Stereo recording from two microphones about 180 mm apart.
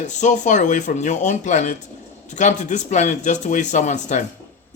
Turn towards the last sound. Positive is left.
turn(degrees=40)  # may be behind; listen again after turning